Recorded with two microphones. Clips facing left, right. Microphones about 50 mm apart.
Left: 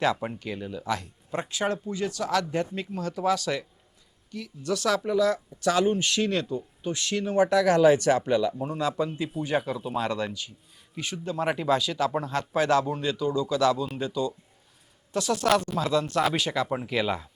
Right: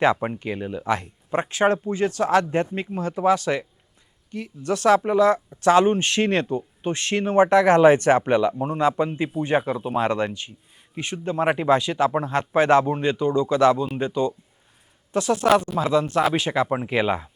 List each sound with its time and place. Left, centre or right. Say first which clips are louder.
0.0 s speech: right 6 dB; right
15.1 s speech: right 5 dB; right